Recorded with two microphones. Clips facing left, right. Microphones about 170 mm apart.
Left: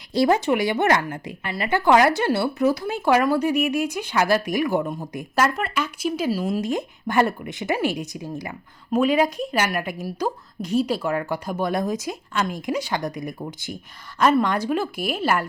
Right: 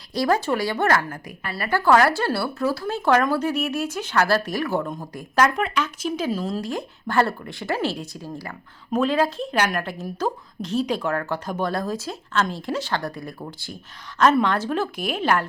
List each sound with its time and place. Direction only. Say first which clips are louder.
0.1 s a woman's voice: left 3 dB; 25° left (ahead or behind)
6.6 s a woman's voice: left 3 dB; 20° left (ahead or behind)